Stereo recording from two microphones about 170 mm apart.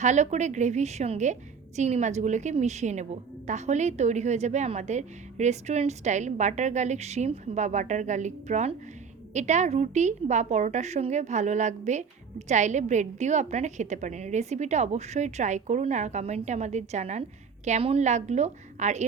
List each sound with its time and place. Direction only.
0.0 s a woman's voice: 45° right (ahead or behind)